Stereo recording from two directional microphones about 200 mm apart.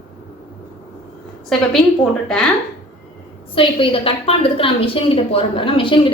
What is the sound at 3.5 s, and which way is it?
A woman's voice, 25° left (ahead or behind).